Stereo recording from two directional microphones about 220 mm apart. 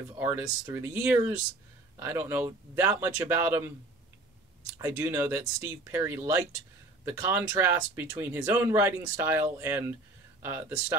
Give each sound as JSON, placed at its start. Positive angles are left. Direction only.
{"t": 0.2, "sound": "speech", "side_deg": -10}
{"t": 4.7, "sound": "speech", "side_deg": -10}